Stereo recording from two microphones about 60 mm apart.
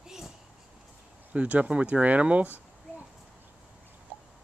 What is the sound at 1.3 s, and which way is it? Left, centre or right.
Speech, right.